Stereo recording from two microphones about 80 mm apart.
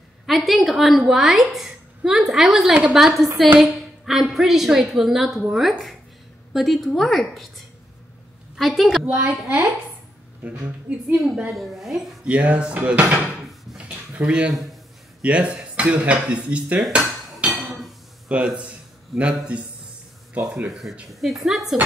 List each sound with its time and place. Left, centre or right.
0.3 s a woman's voice: centre
8.5 s a woman's voice: centre
9.0 s a woman's voice: centre
10.6 s speech: centre
11.1 s a woman's voice: centre
12.3 s speech: centre
13.4 s drawer open or close: centre
13.7 s a sound: centre
14.5 s a man's voice: centre
15.2 s speech: centre
17.5 s dishes: centre
18.3 s a woman's voice: centre